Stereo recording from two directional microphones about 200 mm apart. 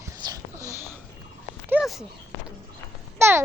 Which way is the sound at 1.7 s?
Centre (ahead or behind).